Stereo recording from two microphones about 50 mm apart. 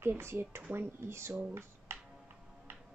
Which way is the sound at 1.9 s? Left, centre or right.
Right.